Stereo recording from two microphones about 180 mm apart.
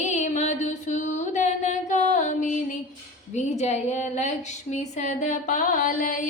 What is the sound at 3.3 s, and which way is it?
A woman's voice, 40° left (ahead or behind).